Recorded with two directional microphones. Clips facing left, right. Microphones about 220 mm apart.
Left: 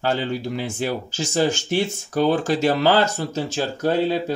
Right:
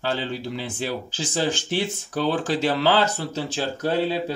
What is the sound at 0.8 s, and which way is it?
Speech, 45° left (ahead or behind).